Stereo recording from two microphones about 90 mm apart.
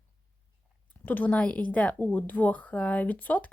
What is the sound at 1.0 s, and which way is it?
A woman's voice, 20° left (ahead or behind).